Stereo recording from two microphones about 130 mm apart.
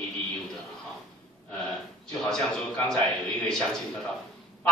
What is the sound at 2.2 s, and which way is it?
A man's voice, 5° left (ahead or behind).